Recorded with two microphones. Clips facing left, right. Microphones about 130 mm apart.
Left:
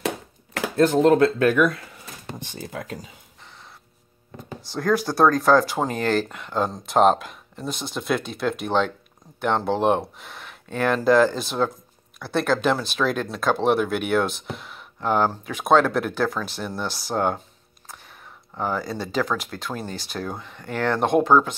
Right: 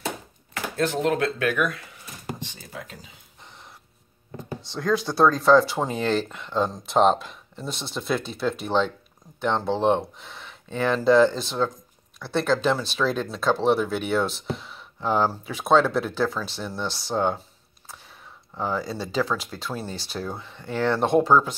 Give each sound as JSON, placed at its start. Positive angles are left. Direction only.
{"t": 0.7, "sound": "speech", "side_deg": 40}
{"t": 2.4, "sound": "speech", "side_deg": 55}
{"t": 4.7, "sound": "speech", "side_deg": 0}
{"t": 18.6, "sound": "speech", "side_deg": 0}